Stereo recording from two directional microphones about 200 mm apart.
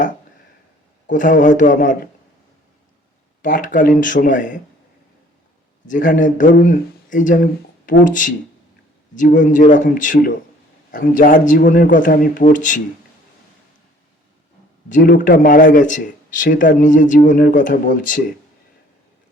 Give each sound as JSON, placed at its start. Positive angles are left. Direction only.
{"t": 1.1, "sound": "speech", "side_deg": 40}
{"t": 3.4, "sound": "speech", "side_deg": 40}
{"t": 5.8, "sound": "speech", "side_deg": 40}
{"t": 14.8, "sound": "a man's voice", "side_deg": 40}